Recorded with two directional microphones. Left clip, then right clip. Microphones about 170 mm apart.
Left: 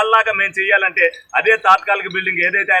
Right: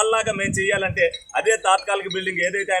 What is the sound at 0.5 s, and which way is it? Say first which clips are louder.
A man's voice: left 6 dB; 30° right (ahead or behind).